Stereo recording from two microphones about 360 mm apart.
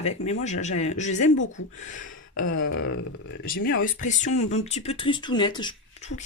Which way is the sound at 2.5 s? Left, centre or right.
Left.